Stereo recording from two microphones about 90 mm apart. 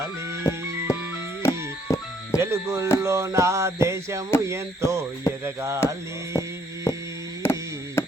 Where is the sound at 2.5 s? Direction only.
30° right (ahead or behind).